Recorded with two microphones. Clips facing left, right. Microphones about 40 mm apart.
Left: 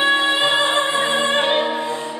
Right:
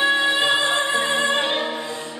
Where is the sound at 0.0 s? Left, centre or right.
Centre.